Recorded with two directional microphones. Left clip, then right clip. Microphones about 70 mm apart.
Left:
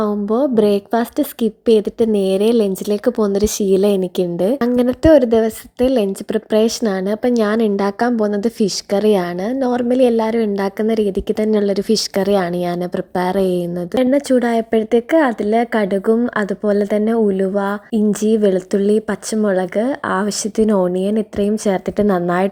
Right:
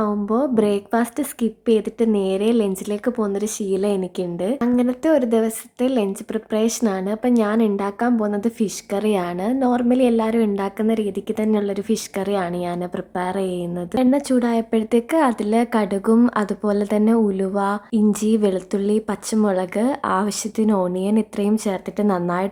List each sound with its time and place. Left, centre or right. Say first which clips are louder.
0.0 s a woman's voice: left 4 dB; left
9.5 s a woman's voice: left 1 dB; left
13.1 s a woman's voice: left 7 dB; left
13.9 s speech: left 4 dB; left
18.1 s speech: left 6 dB; left
20.6 s a woman's voice: left 5 dB; left
21.7 s a woman's voice: left 6 dB; left